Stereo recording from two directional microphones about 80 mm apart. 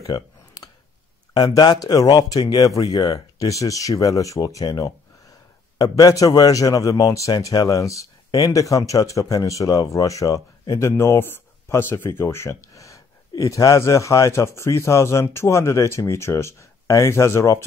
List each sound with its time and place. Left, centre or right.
0.0 s a sound: left
1.8 s speech: left
4.6 s a man's voice: left